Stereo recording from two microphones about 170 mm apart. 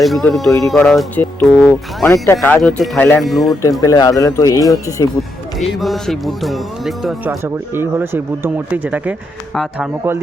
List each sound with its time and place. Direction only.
0.0 s speech: centre (ahead or behind)
3.6 s speech: 20° left (ahead or behind)
5.5 s speech: centre (ahead or behind)
7.3 s speech: 15° right (ahead or behind)